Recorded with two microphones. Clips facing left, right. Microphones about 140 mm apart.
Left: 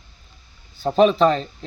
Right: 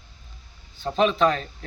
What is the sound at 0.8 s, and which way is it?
Speech, 40° left (ahead or behind).